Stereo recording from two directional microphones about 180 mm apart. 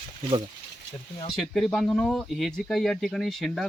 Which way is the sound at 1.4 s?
Centre (ahead or behind).